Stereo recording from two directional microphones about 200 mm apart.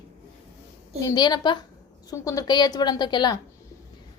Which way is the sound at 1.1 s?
20° left (ahead or behind).